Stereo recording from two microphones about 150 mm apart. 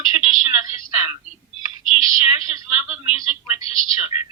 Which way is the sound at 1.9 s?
40° left (ahead or behind).